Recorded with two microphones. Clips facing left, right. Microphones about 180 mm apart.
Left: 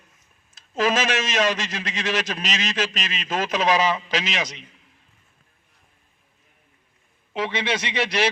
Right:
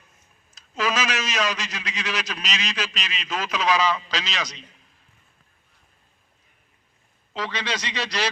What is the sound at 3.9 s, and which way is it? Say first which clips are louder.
Speech: left 4 dB; 20° left (ahead or behind).